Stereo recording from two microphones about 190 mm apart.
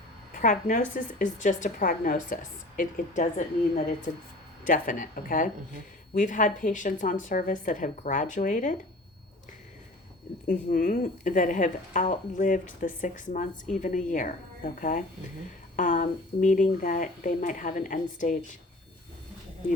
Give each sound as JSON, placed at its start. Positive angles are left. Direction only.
{"t": 0.4, "sound": "speech", "side_deg": 45}
{"t": 10.4, "sound": "speech", "side_deg": 45}